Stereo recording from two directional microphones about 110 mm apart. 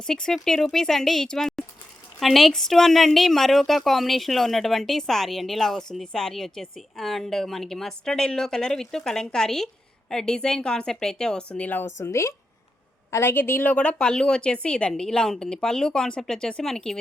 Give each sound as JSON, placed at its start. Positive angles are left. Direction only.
{"t": 0.1, "sound": "a woman's voice", "side_deg": 5}
{"t": 11.9, "sound": "a woman's voice", "side_deg": 25}